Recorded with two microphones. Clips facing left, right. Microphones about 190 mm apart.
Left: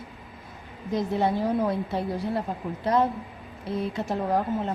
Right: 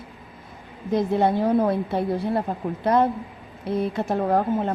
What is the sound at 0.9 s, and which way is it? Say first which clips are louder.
A woman's voice: right 4 dB; 55° right (ahead or behind).